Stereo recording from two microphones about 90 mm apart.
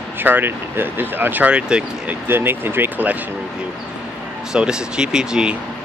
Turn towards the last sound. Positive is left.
turn(degrees=-10)  # may be behind; listen again after turning